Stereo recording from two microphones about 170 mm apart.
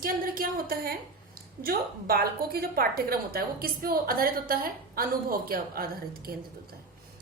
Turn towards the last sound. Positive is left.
turn(degrees=-60)  # may be behind; listen again after turning